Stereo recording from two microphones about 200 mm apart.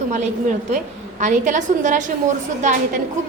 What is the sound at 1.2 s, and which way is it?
A woman's voice, 40° right (ahead or behind).